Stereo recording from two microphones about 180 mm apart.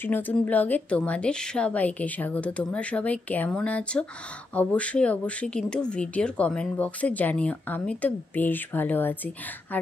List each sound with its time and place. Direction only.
0.0 s speech: 10° left (ahead or behind)